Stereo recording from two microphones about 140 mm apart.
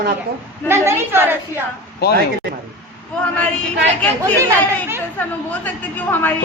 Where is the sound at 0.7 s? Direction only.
15° right (ahead or behind).